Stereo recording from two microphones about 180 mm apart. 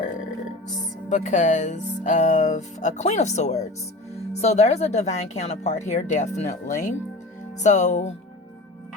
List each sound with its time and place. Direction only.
1.1 s speech: 40° left (ahead or behind)